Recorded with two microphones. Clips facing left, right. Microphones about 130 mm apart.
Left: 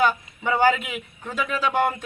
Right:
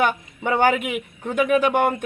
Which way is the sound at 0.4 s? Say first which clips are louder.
Right 1 dB; 60° right (ahead or behind).